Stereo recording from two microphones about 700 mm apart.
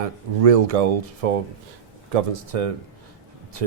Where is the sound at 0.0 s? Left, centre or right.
Right.